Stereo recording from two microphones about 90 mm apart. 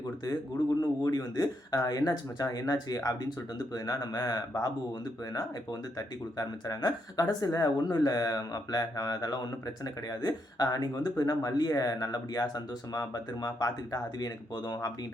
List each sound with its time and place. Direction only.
0.8 s speech: 45° left (ahead or behind)
6.0 s speech: 45° left (ahead or behind)